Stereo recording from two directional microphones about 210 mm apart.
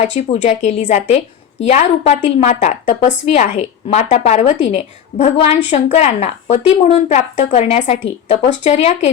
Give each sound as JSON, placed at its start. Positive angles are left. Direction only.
{"t": 0.0, "sound": "a woman's voice", "side_deg": 30}